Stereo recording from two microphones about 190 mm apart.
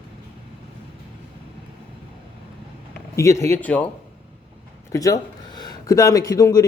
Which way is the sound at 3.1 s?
15° left (ahead or behind).